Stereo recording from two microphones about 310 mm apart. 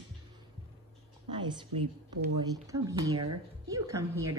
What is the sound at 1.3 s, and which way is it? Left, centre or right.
A woman's voice, centre.